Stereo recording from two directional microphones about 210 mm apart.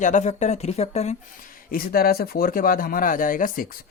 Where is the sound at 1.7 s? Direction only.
45° left (ahead or behind).